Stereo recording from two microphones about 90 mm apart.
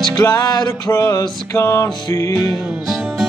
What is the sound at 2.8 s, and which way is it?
Music, 5° right (ahead or behind).